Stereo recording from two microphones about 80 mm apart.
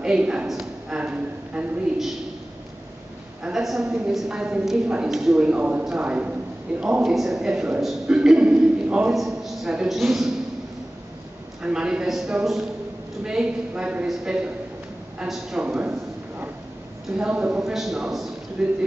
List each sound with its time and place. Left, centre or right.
0.0 s a woman's voice: centre
3.4 s a woman's voice: centre
9.1 s a man's voice: centre
11.6 s a woman's voice: centre
17.2 s a woman's voice: centre
17.6 s a man's voice: centre